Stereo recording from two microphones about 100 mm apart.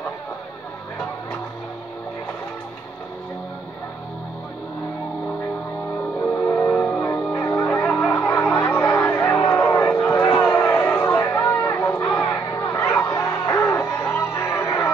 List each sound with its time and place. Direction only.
6.3 s music: 20° left (ahead or behind)
7.3 s music: 25° left (ahead or behind)
7.6 s music: 15° left (ahead or behind)